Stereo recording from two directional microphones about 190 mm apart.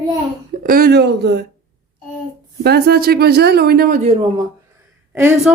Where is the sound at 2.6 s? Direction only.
55° right (ahead or behind).